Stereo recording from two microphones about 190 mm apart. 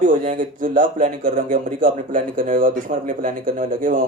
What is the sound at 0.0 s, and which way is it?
Speech, 45° right (ahead or behind).